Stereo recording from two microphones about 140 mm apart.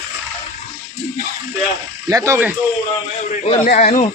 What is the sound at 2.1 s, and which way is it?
Speech, 25° right (ahead or behind).